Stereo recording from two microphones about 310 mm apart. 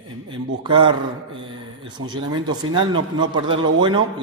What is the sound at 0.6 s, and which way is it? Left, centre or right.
Speech, centre.